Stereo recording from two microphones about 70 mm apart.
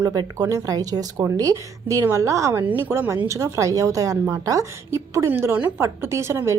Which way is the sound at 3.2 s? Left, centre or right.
Right.